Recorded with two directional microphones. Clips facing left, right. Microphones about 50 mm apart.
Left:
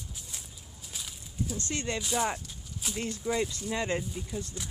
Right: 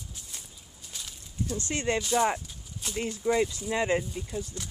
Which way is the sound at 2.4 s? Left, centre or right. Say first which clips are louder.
Even; centre.